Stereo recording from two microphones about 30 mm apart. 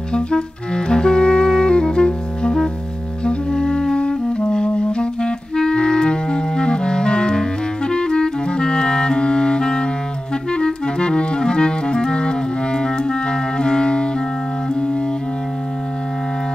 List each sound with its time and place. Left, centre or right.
0.1 s clarinet: left
3.3 s music: left
10.5 s clarinet: left